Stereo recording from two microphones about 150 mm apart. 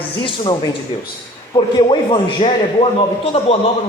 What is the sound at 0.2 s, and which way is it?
Speech, 35° left (ahead or behind).